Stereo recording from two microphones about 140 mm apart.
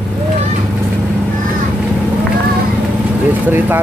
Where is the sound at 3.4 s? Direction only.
15° right (ahead or behind).